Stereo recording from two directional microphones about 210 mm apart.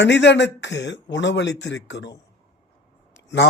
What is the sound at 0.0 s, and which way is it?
Speech, 55° left (ahead or behind).